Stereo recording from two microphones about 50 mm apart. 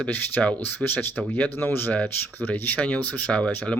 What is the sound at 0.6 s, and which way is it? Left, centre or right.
Speech, left.